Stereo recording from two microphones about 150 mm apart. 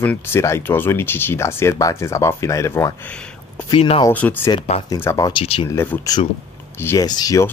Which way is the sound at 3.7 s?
40° left (ahead or behind).